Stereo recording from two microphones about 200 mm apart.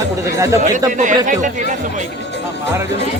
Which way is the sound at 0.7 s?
40° right (ahead or behind).